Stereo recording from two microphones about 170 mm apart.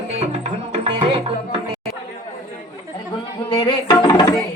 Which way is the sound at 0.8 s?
30° right (ahead or behind).